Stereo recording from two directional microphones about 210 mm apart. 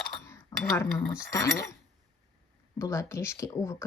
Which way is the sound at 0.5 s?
15° left (ahead or behind).